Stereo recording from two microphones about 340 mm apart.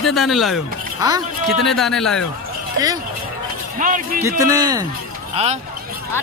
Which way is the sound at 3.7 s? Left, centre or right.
Right.